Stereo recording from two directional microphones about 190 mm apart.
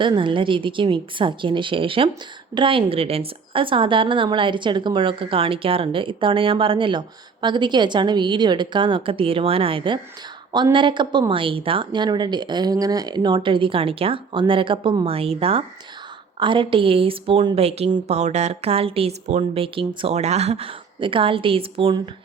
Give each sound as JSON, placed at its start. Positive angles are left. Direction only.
{"t": 0.0, "sound": "a woman's voice", "side_deg": -25}